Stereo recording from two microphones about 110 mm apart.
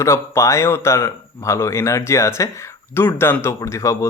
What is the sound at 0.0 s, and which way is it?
Speech, 25° left (ahead or behind).